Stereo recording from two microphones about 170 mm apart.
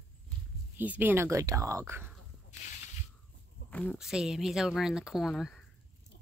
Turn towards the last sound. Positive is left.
turn(degrees=0)  # may be behind; listen again after turning